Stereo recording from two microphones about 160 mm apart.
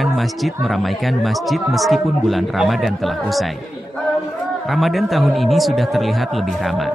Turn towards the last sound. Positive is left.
turn(degrees=0)  # may be behind; listen again after turning